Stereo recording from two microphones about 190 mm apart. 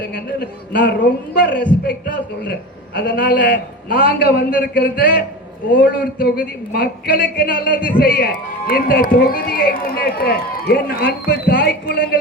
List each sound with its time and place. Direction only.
0.1 s a man's voice: 50° left (ahead or behind)